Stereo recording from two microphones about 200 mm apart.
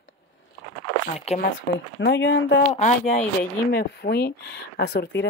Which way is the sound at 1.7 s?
45° left (ahead or behind).